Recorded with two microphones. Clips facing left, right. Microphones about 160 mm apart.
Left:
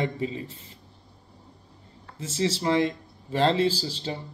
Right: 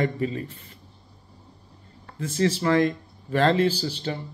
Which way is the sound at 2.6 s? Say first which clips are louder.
Right 3 dB; 20° left (ahead or behind).